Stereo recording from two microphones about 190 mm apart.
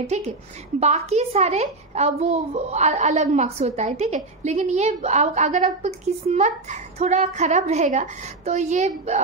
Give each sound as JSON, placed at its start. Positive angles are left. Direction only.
{"t": 0.0, "sound": "a woman's voice", "side_deg": -35}